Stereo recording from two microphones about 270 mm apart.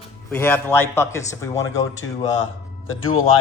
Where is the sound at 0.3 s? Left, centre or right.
Centre.